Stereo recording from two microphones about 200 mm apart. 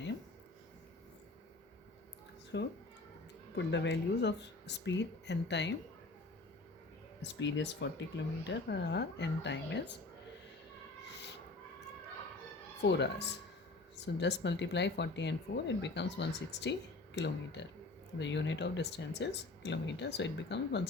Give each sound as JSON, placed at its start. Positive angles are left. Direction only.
{"t": 2.5, "sound": "speech", "side_deg": 60}
{"t": 7.2, "sound": "speech", "side_deg": 65}
{"t": 12.8, "sound": "speech", "side_deg": 60}